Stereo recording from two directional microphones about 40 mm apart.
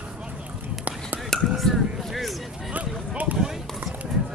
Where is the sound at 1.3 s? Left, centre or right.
Centre.